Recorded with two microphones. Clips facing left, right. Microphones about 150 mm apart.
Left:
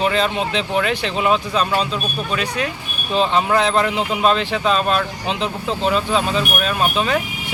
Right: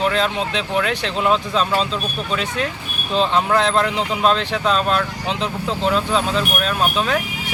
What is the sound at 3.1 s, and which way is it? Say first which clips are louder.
Speech: even; 15° left (ahead or behind).